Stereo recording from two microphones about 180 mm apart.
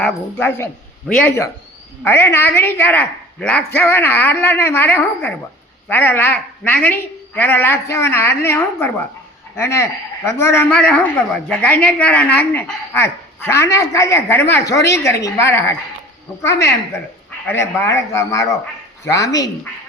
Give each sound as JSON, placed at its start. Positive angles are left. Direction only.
{"t": 0.0, "sound": "a woman's voice", "side_deg": 10}
{"t": 2.0, "sound": "a woman's voice", "side_deg": 15}